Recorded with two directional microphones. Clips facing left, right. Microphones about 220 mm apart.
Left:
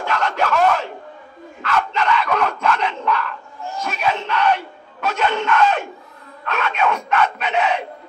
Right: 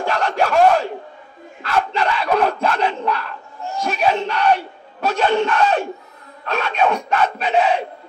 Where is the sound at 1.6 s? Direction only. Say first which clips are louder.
Right 1 dB; 35° right (ahead or behind).